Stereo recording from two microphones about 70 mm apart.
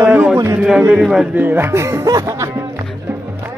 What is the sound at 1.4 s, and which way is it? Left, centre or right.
Speech, right.